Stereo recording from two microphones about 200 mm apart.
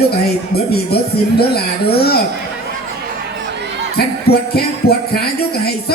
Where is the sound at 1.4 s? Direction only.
50° left (ahead or behind).